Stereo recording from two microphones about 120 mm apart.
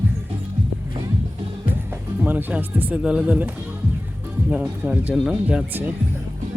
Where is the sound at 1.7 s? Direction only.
15° right (ahead or behind).